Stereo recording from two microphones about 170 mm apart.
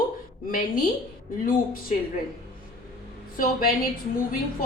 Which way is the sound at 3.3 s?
55° left (ahead or behind).